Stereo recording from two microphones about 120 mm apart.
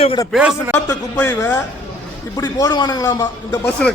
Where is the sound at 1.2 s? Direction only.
20° left (ahead or behind).